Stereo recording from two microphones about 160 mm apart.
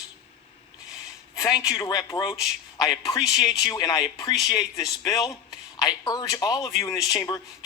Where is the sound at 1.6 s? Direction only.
20° left (ahead or behind).